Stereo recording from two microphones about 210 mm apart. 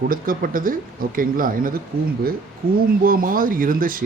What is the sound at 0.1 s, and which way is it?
Speech, 40° right (ahead or behind).